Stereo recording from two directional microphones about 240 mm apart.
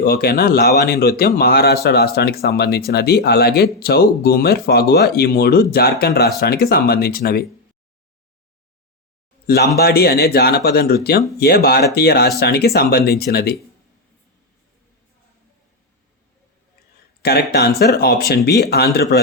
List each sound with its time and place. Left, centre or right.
0.0 s a man's voice: left
9.5 s a man's voice: left
17.2 s a man's voice: left